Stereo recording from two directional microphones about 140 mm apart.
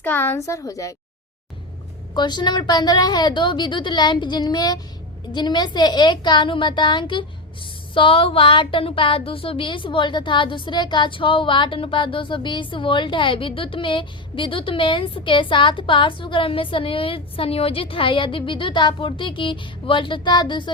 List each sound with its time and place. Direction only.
0.0 s a woman's voice: 15° left (ahead or behind)
2.1 s a woman's voice: 30° left (ahead or behind)